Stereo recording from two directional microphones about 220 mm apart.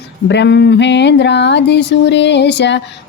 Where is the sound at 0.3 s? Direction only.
50° left (ahead or behind).